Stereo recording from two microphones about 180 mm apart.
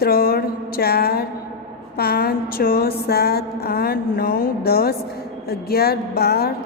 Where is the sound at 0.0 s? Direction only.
55° left (ahead or behind).